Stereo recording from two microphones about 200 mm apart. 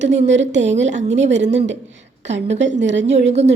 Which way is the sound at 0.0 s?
35° right (ahead or behind).